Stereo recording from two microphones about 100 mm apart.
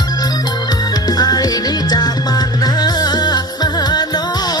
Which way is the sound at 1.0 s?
40° left (ahead or behind).